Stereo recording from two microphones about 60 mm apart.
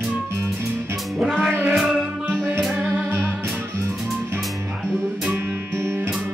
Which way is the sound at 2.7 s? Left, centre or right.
Right.